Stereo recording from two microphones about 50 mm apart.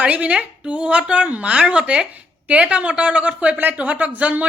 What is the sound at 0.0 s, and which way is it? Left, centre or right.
A woman's voice, right.